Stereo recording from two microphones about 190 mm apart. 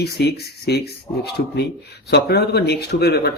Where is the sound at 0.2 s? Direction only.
60° left (ahead or behind).